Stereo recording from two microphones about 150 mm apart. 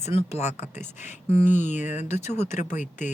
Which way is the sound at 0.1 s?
45° left (ahead or behind).